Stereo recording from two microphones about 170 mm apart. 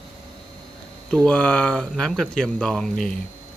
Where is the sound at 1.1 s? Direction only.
5° left (ahead or behind).